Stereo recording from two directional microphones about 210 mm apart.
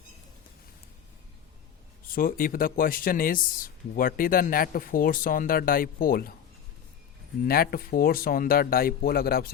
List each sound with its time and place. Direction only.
2.0 s speech: 40° left (ahead or behind)
7.4 s speech: 45° left (ahead or behind)